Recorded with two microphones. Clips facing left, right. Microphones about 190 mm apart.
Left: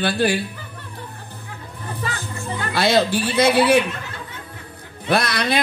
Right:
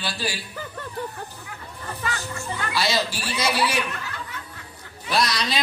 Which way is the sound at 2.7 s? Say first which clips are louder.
Left 8 dB; 55° left (ahead or behind).